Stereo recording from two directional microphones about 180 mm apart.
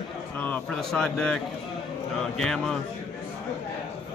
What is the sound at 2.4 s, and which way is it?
Speech, centre (ahead or behind).